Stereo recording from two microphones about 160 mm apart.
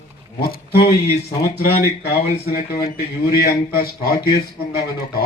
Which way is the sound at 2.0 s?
75° left (ahead or behind).